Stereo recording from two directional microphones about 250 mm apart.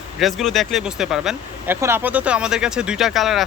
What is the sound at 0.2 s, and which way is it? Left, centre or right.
Speech, centre.